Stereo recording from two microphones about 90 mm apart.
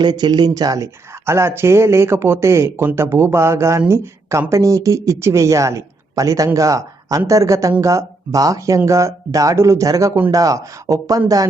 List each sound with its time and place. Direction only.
0.0 s speech: 55° right (ahead or behind)
1.2 s speech: 30° right (ahead or behind)